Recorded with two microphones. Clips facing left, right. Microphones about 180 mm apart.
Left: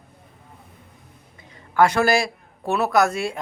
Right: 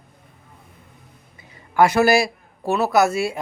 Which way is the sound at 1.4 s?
10° right (ahead or behind).